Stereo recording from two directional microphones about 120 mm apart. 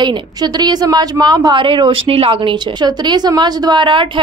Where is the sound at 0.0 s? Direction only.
35° right (ahead or behind); by 2.5 s 50° right (ahead or behind).